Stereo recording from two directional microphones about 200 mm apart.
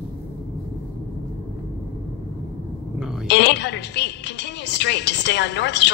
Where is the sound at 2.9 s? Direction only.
Centre (ahead or behind).